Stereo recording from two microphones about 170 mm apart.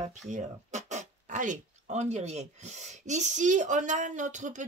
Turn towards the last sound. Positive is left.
turn(degrees=-45)  # may be behind; listen again after turning